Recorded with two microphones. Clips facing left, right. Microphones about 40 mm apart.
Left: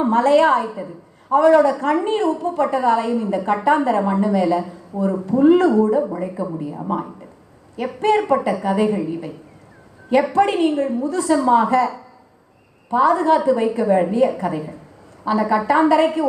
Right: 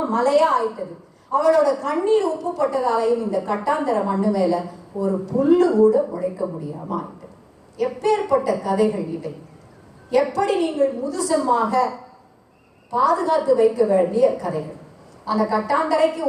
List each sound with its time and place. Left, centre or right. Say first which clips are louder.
0.0 s a woman's voice: left 3 dB; left
12.9 s a woman's voice: left 3 dB; left